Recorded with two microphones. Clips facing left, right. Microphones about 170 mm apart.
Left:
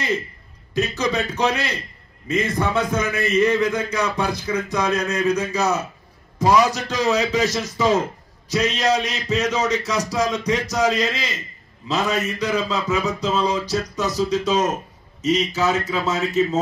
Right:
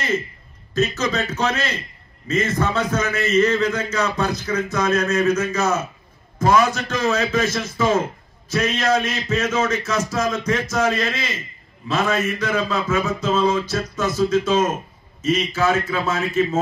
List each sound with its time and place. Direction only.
0.7 s a man's voice: 15° left (ahead or behind)